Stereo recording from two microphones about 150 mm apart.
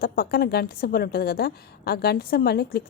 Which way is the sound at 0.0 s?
85° left.